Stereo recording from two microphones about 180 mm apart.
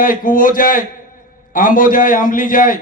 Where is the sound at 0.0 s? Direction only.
50° left (ahead or behind).